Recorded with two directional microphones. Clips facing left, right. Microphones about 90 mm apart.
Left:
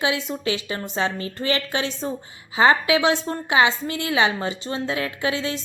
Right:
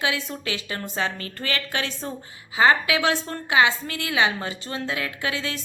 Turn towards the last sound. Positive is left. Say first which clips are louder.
# left 4 dB
turn(degrees=25)  # may be behind; listen again after turning